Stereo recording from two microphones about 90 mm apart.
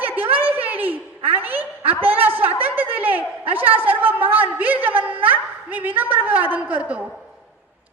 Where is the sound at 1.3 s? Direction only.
20° right (ahead or behind).